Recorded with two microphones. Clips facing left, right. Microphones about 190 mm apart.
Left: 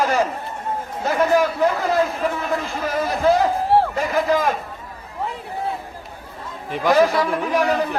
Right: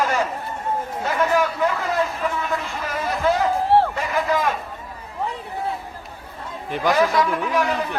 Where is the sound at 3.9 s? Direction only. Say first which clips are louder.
Left 3 dB; 40° left (ahead or behind).